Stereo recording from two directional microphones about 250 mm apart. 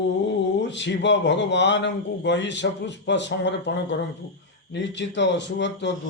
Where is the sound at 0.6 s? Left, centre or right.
Left.